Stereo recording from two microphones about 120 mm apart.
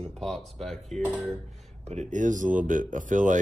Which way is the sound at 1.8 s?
70° right (ahead or behind).